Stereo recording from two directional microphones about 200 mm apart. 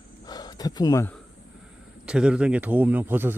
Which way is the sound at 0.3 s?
20° left (ahead or behind).